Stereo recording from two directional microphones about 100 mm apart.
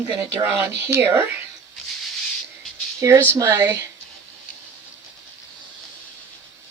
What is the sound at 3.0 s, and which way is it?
Speech, 40° right (ahead or behind).